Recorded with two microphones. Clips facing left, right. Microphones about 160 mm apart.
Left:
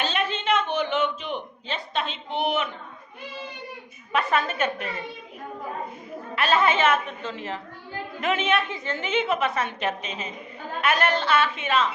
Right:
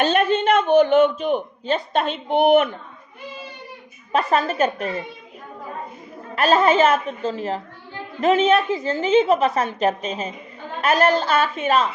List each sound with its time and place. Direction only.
0.0 s a sound: 50° right (ahead or behind)
4.1 s a woman's voice: 35° right (ahead or behind)
6.3 s a woman's voice: 40° right (ahead or behind)